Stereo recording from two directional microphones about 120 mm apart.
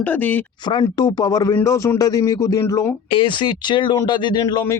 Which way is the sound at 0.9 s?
35° left (ahead or behind).